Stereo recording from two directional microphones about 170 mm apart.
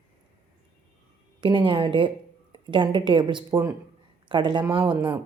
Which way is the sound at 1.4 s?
30° right (ahead or behind).